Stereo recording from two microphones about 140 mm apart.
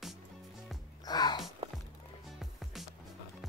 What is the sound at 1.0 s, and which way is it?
Music, 30° left (ahead or behind).